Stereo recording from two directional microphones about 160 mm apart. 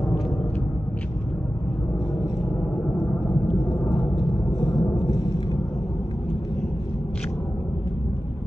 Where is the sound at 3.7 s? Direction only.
25° left (ahead or behind).